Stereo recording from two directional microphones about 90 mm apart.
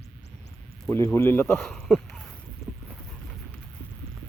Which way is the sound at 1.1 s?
25° left (ahead or behind).